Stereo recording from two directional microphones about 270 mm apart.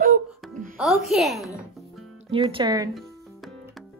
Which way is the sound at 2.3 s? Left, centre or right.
Centre.